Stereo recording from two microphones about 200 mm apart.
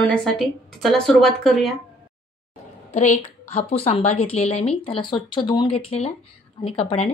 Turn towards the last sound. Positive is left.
turn(degrees=30)  # may be behind; listen again after turning